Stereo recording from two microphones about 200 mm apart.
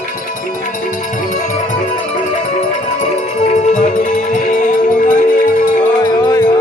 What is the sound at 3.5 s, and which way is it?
Music, 35° left (ahead or behind).